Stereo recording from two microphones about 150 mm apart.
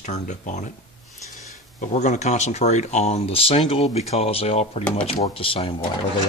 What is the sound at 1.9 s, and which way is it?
Speech, 50° left (ahead or behind).